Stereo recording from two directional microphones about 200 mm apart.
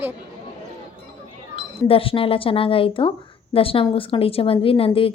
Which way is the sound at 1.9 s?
25° left (ahead or behind).